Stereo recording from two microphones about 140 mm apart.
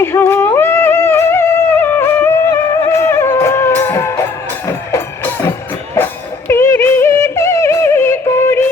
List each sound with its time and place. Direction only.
0.0 s music: 15° left (ahead or behind)